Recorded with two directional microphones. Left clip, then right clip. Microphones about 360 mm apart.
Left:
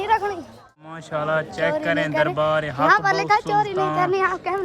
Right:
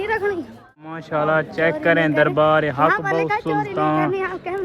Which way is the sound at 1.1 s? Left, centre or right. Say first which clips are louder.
Right 4 dB; centre.